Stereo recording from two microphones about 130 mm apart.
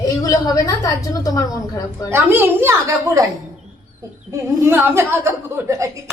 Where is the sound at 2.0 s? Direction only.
15° right (ahead or behind).